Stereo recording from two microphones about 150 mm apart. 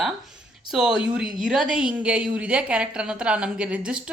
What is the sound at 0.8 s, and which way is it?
A woman's voice, 5° right (ahead or behind).